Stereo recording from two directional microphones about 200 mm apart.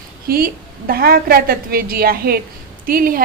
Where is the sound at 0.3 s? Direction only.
50° right (ahead or behind).